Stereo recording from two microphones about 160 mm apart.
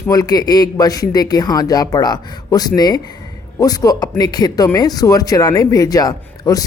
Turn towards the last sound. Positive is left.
turn(degrees=25)  # may be behind; listen again after turning